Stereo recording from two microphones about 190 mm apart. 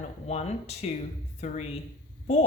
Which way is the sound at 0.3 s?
35° left (ahead or behind).